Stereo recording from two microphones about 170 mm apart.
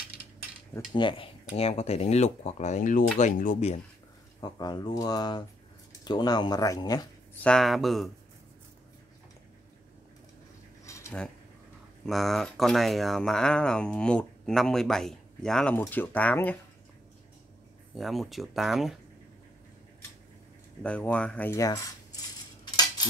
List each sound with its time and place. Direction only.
0.9 s speech: 30° left (ahead or behind)
4.4 s speech: 25° left (ahead or behind)
7.4 s speech: centre (ahead or behind)
10.9 s cutlery: 15° left (ahead or behind)
12.1 s speech: centre (ahead or behind)
15.8 s cutlery: 10° left (ahead or behind)
17.9 s speech: centre (ahead or behind)
20.8 s cutlery: 5° left (ahead or behind)